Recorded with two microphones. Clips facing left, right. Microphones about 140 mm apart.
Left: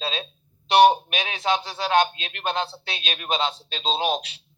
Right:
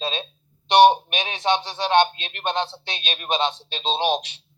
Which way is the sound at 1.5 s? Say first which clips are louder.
Right 2 dB; 25° right (ahead or behind).